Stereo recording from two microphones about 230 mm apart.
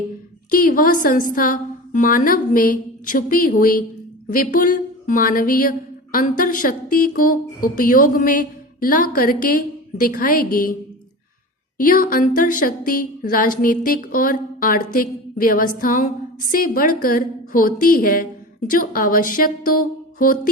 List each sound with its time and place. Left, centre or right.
0.5 s speech: left
11.8 s speech: left